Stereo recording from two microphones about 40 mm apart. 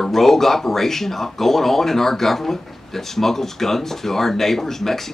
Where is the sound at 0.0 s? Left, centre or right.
Centre.